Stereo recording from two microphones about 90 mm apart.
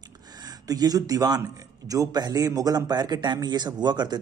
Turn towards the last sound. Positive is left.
turn(degrees=-50)  # may be behind; listen again after turning